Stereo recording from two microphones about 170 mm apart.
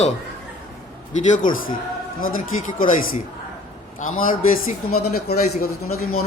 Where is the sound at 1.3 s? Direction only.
55° left (ahead or behind).